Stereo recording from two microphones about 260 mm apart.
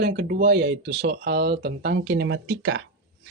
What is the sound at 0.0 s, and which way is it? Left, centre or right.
Speech, right.